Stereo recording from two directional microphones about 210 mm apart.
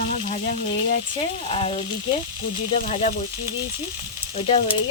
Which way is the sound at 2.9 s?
30° left (ahead or behind).